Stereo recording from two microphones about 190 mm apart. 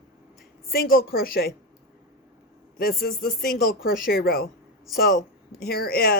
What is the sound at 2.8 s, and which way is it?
Speech, 50° left (ahead or behind).